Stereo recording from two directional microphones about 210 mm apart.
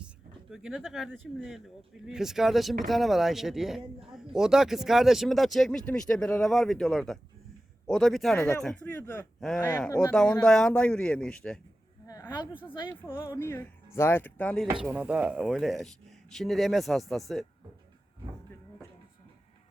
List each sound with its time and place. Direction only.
0.5 s speech: 5° right (ahead or behind); by 10.0 s 15° left (ahead or behind)
10.1 s speech: 5° left (ahead or behind)
12.0 s a sound: 15° left (ahead or behind)
12.9 s speech: 10° left (ahead or behind)